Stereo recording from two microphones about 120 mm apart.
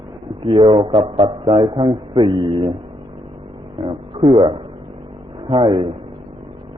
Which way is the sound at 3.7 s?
45° right (ahead or behind).